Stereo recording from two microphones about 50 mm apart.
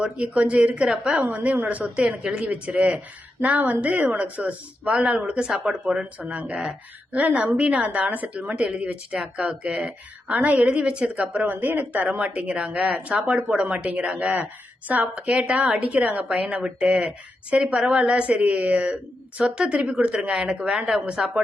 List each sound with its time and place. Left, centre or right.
0.0 s a woman's voice: right
5.5 s speech: centre
6.2 s a woman's voice: right
10.7 s a woman's voice: right
11.4 s a woman's voice: right
15.0 s a woman's voice: right